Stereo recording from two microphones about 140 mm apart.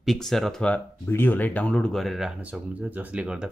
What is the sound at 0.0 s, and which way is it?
Speech, centre (ahead or behind).